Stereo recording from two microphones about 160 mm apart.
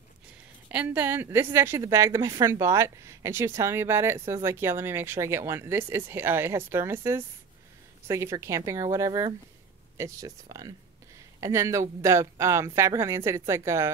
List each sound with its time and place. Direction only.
0.7 s a woman's voice: 10° right (ahead or behind)